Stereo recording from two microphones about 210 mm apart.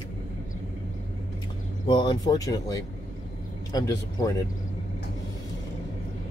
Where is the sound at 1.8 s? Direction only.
20° left (ahead or behind).